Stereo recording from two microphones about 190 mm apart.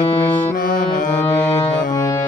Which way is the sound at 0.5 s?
45° left (ahead or behind).